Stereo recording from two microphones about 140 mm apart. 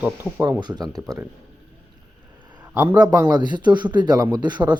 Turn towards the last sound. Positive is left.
turn(degrees=-30)  # may be behind; listen again after turning